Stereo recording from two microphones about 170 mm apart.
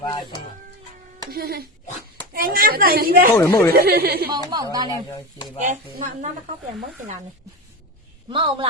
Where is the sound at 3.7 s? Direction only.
65° right (ahead or behind).